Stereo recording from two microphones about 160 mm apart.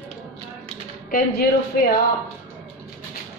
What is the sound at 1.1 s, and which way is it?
Speech, 70° left (ahead or behind).